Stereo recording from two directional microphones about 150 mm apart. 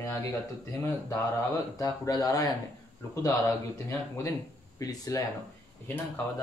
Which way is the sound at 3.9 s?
20° left (ahead or behind).